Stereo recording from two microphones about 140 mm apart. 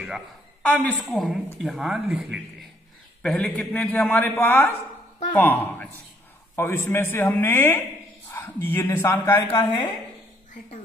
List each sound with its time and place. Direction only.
0.6 s a man's voice: 10° left (ahead or behind)
9.6 s a woman's voice: 35° left (ahead or behind)